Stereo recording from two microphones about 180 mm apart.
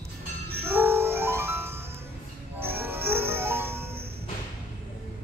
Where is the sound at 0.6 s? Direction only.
10° right (ahead or behind).